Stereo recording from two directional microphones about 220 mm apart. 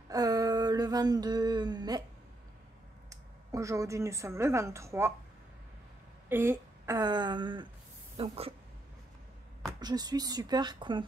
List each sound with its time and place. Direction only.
0.1 s a sound: 15° right (ahead or behind)
3.1 s speech: 15° right (ahead or behind)
6.2 s speech: 10° right (ahead or behind); by 8.5 s 25° right (ahead or behind)
9.8 s speech: 20° right (ahead or behind)